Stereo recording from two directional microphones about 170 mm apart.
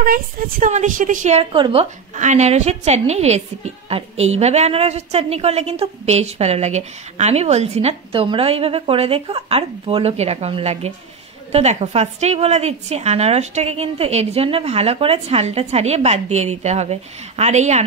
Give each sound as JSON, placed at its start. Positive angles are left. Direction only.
{"t": 0.0, "sound": "a woman's voice", "side_deg": -55}
{"t": 2.1, "sound": "a woman's voice", "side_deg": -45}